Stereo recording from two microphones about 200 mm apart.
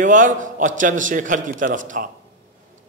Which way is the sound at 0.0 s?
40° right (ahead or behind).